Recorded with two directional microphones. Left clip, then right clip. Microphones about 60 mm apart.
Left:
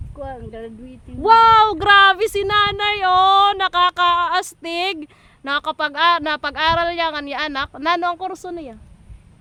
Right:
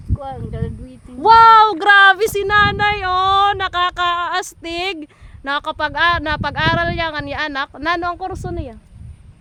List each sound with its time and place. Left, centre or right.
0.2 s speech: left
1.2 s speech: centre
1.5 s speech: centre